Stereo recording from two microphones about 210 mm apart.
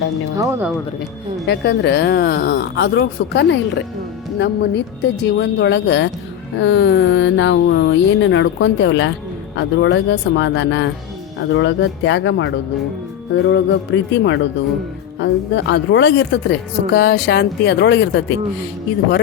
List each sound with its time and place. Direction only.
0.3 s speech: 15° right (ahead or behind)
1.5 s a woman's voice: 50° left (ahead or behind)